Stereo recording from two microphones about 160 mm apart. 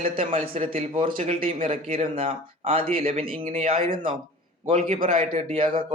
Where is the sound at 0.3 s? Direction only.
40° right (ahead or behind).